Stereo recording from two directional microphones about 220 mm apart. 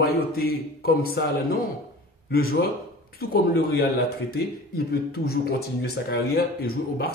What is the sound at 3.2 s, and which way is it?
Speech, 45° left (ahead or behind).